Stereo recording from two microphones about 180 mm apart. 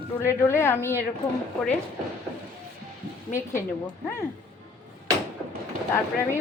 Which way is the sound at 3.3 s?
15° left (ahead or behind).